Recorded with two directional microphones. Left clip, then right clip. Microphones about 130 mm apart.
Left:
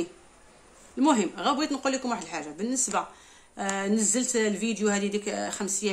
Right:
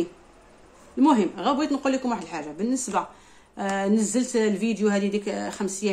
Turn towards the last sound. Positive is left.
turn(degrees=15)  # may be behind; listen again after turning